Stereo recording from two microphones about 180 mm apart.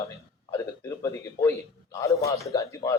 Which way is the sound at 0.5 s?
15° left (ahead or behind).